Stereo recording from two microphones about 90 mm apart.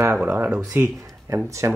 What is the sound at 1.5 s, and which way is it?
Speech, 35° right (ahead or behind).